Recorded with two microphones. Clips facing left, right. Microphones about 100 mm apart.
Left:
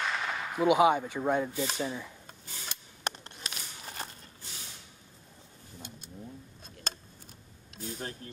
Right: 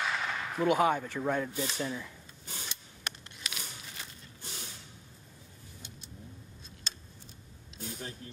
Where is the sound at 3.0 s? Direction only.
40° left (ahead or behind).